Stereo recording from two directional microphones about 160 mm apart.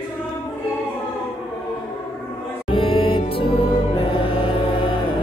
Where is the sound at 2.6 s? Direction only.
35° left (ahead or behind).